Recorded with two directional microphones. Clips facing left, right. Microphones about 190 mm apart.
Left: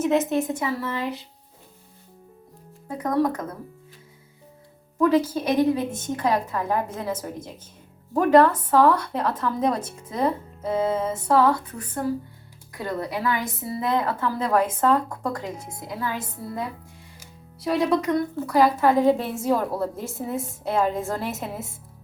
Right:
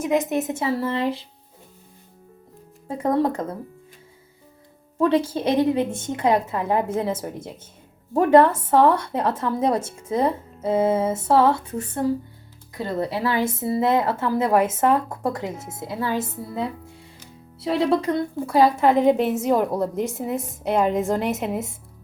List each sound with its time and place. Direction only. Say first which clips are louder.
0.0 s a woman's voice: even; 15° right (ahead or behind)
2.8 s a woman's voice: right 2 dB; 25° right (ahead or behind)
4.9 s a woman's voice: even; 30° right (ahead or behind)
17.6 s a woman's voice: right 1 dB; 25° right (ahead or behind)